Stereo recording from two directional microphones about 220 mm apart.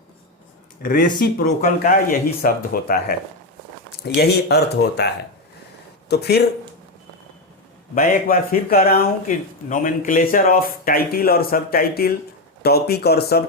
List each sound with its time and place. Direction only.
0.8 s speech: 40° left (ahead or behind)
7.9 s speech: 40° left (ahead or behind)